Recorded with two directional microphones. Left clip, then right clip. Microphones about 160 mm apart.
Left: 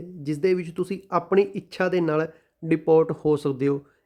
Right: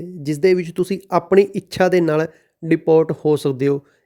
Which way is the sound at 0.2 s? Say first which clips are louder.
Right 7 dB; 30° right (ahead or behind).